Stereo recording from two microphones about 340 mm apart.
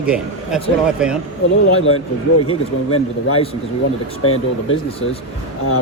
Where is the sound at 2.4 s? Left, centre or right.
Centre.